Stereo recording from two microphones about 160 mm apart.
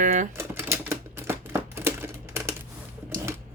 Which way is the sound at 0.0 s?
50° right (ahead or behind).